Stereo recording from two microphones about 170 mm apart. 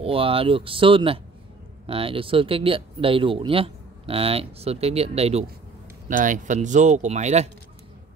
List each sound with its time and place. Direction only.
0.0 s speech: 35° right (ahead or behind)
6.0 s speech: 50° right (ahead or behind)